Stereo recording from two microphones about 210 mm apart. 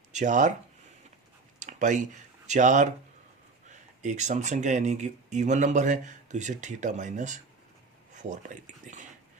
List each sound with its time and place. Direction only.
0.1 s speech: 35° right (ahead or behind)
1.5 s a sound: 35° right (ahead or behind)
2.5 s speech: 35° right (ahead or behind)